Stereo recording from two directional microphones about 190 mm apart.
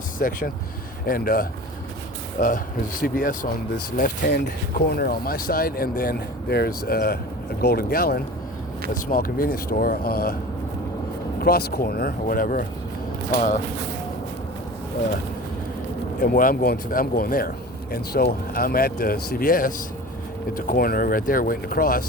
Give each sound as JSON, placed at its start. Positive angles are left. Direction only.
{"t": 0.2, "sound": "speech", "side_deg": 45}
{"t": 11.3, "sound": "speech", "side_deg": 55}
{"t": 16.2, "sound": "speech", "side_deg": 50}